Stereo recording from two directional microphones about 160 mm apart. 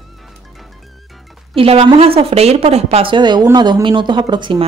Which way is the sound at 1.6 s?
35° right (ahead or behind).